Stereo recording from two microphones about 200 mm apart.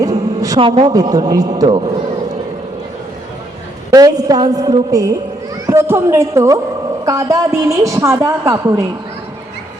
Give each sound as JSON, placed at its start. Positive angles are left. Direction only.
{"t": 0.0, "sound": "a man's voice", "side_deg": -15}
{"t": 3.9, "sound": "a woman's voice", "side_deg": -20}